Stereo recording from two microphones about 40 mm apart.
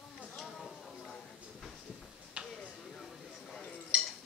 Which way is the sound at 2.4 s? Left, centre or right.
Right.